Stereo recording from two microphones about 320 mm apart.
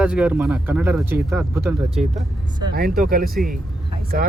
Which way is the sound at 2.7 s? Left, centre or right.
Right.